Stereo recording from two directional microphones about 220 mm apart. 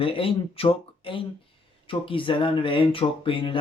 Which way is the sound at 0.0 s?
25° left (ahead or behind).